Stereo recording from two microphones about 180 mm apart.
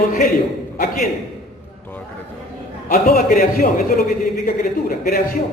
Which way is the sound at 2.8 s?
50° left (ahead or behind).